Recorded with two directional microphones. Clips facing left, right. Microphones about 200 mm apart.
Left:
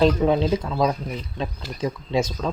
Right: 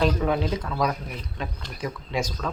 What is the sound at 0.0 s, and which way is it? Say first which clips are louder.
Speech: left 5 dB; 25° left (ahead or behind).